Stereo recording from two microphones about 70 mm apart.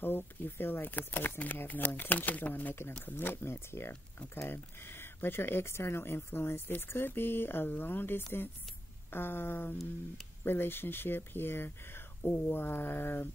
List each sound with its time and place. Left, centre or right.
0.0 s speech: left